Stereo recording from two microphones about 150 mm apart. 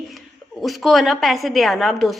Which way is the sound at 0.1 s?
Centre (ahead or behind).